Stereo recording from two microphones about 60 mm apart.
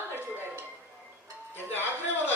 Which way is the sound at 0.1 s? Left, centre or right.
Right.